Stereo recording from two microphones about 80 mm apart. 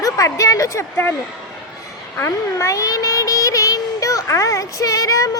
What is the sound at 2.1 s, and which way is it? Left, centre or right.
Speech, left.